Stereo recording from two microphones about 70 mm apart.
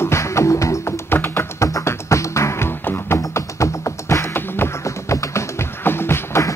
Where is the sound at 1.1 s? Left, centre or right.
Left.